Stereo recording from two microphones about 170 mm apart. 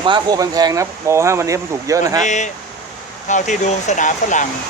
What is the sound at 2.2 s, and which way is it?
Speech, 45° left (ahead or behind).